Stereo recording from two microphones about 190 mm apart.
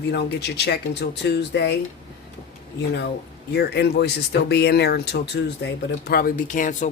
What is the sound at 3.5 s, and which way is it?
Speech, 60° left (ahead or behind).